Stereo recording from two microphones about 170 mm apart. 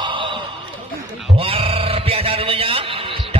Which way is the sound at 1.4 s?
35° right (ahead or behind).